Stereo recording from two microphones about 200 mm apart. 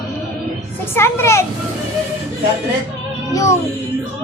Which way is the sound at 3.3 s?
15° left (ahead or behind).